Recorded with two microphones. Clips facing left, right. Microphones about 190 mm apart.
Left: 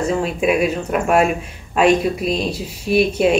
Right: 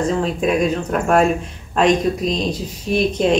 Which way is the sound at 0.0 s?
10° left (ahead or behind).